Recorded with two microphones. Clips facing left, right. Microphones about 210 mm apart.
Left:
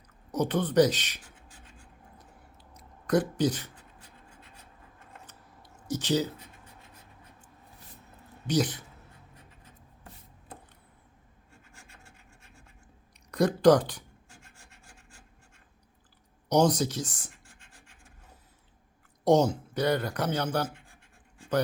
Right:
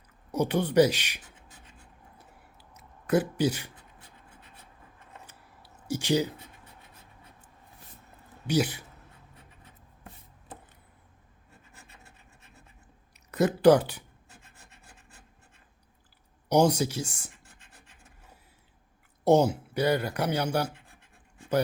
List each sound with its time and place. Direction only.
0.3 s speech: 10° right (ahead or behind)
2.1 s a sound: 5° right (ahead or behind)
5.2 s a sound: 10° right (ahead or behind)
8.4 s speech: 10° right (ahead or behind)
13.3 s speech: 5° right (ahead or behind)
14.6 s rub: 35° right (ahead or behind)
16.5 s speech: 10° right (ahead or behind)
19.2 s speech: 5° right (ahead or behind)